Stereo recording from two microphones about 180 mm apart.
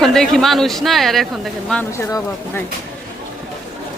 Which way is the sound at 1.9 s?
15° left (ahead or behind).